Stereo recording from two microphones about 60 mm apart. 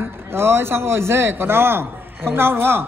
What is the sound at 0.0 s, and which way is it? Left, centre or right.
A man's voice, right.